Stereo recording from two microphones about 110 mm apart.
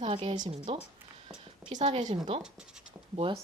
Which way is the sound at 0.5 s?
65° right (ahead or behind).